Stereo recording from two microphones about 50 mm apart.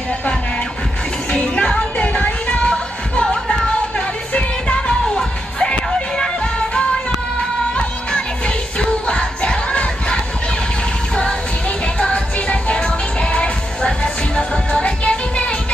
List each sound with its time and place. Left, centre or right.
1.3 s music: left
12.0 s music: left